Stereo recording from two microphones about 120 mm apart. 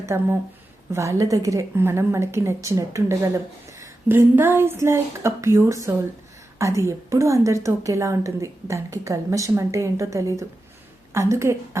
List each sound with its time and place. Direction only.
0.0 s a woman's voice: 20° right (ahead or behind)